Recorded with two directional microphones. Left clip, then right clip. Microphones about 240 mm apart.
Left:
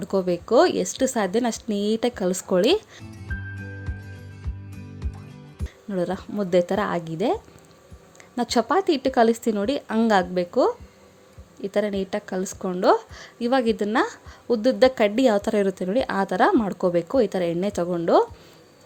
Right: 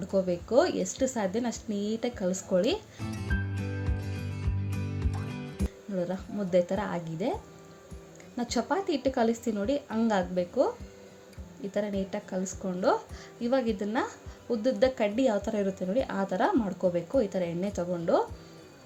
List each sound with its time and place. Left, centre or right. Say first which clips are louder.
0.0 s speech: left 5 dB; left
3.0 s music: right 1 dB; centre
5.9 s speech: left 7 dB; left
8.4 s speech: left 8 dB; left